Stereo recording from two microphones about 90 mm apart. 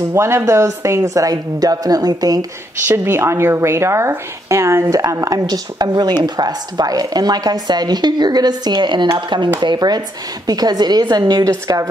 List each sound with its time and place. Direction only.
0.1 s a woman's voice: 30° right (ahead or behind)
2.9 s speech: 25° right (ahead or behind)